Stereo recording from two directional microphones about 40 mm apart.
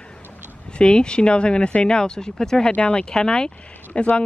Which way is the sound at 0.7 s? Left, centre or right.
Left.